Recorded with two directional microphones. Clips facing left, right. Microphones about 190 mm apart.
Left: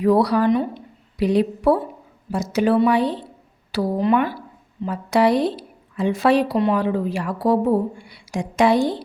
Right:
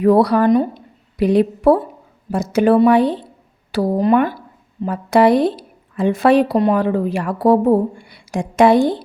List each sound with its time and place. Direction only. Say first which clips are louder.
0.0 s speech: right 4 dB; 55° right (ahead or behind)
1.2 s speech: right 4 dB; 55° right (ahead or behind)